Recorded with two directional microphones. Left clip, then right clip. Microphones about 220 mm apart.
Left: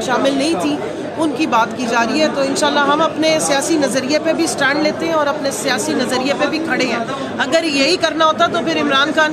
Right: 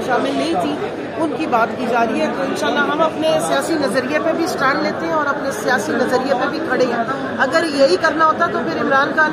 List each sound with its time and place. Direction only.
1.5 s a woman's voice: 15° left (ahead or behind)
7.3 s a woman's voice: 15° left (ahead or behind)
8.0 s speech: 40° left (ahead or behind)